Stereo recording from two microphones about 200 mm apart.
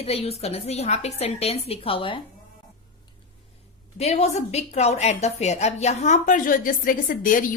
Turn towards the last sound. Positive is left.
turn(degrees=45)  # may be behind; listen again after turning